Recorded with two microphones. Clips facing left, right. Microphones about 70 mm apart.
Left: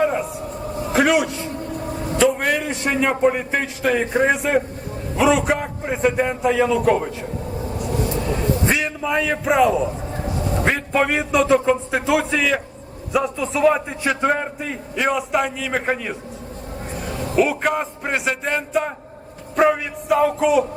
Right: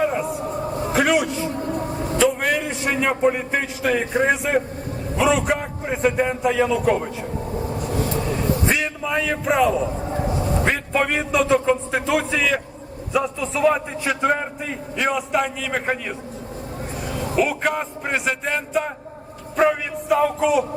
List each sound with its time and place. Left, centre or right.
0.0 s vehicle: centre
0.9 s a sound: centre
2.1 s a man's voice: centre
7.8 s vehicle: right
8.3 s a sound: centre
10.5 s a man's voice: centre
17.3 s a man's voice: centre